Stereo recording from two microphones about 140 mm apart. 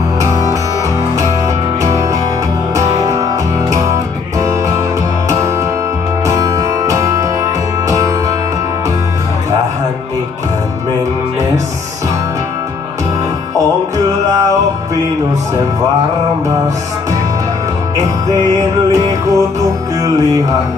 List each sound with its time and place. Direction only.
1.8 s music: 20° right (ahead or behind)
4.4 s music: 25° right (ahead or behind)
19.2 s music: 25° right (ahead or behind)